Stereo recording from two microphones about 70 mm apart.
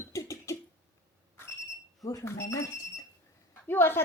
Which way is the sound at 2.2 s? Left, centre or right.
Left.